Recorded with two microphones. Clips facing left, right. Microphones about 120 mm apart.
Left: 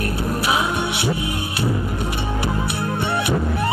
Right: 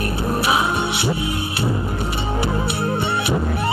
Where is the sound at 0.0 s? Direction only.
25° right (ahead or behind).